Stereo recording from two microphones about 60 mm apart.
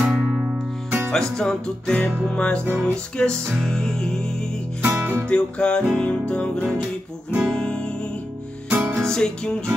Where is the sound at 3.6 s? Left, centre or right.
Centre.